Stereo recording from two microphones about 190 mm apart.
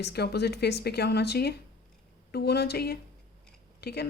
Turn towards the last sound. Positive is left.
turn(degrees=60)  # may be behind; listen again after turning